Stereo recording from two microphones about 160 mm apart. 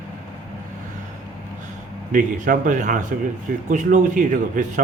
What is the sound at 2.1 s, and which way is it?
A man's voice, 55° right (ahead or behind).